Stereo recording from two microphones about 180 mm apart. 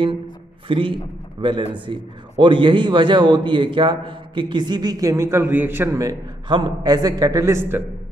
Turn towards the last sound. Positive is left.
turn(degrees=-15)  # may be behind; listen again after turning